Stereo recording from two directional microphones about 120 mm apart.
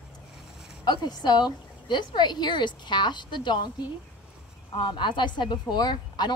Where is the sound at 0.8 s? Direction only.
35° left (ahead or behind).